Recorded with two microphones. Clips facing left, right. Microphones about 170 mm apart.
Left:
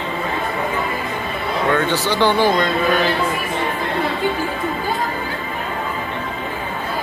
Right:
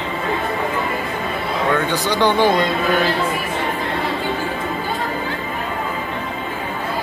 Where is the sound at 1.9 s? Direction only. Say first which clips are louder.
Even; 15° right (ahead or behind).